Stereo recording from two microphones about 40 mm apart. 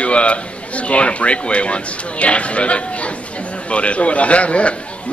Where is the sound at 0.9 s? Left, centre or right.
Left.